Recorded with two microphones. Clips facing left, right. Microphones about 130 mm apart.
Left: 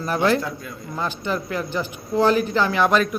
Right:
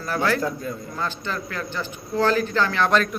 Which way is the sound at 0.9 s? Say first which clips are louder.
Left 7 dB; 15° left (ahead or behind).